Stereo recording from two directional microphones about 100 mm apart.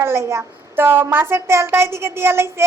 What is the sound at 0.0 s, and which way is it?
A woman's voice, 25° right (ahead or behind).